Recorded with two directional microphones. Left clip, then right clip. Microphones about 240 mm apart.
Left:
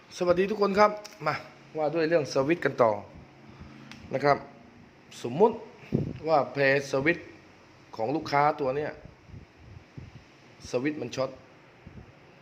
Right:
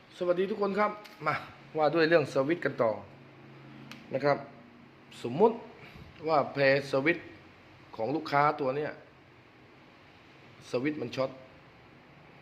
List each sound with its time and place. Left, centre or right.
0.1 s a man's voice: left
1.2 s speech: centre
1.7 s a man's voice: centre
2.4 s a man's voice: centre
4.1 s a man's voice: centre
10.7 s speech: centre